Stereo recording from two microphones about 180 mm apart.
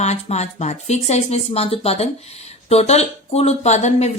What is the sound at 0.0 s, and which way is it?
Speech, 40° left (ahead or behind).